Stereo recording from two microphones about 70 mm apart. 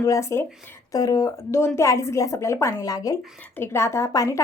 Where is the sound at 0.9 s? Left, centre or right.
Left.